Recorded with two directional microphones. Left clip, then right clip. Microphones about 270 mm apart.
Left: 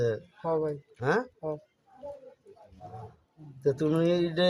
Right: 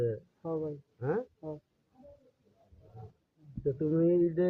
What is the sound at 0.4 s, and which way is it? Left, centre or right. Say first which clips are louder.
Speech: left 7 dB; left.